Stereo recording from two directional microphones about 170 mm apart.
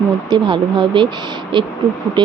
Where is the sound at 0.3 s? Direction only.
30° right (ahead or behind).